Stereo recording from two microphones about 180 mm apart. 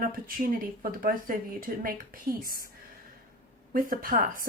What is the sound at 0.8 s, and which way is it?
Speech, 50° right (ahead or behind).